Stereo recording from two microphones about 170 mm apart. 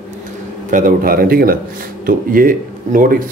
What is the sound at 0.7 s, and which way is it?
A man's voice, 55° right (ahead or behind).